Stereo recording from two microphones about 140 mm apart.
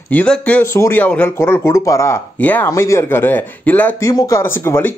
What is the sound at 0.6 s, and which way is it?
Speech, 20° left (ahead or behind).